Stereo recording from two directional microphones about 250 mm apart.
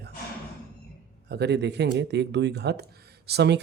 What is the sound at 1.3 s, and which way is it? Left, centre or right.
Speech, right.